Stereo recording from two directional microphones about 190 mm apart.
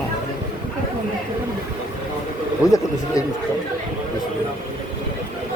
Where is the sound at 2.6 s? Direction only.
15° left (ahead or behind).